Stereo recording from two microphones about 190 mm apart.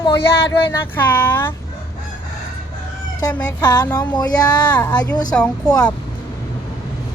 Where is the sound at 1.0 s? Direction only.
10° left (ahead or behind).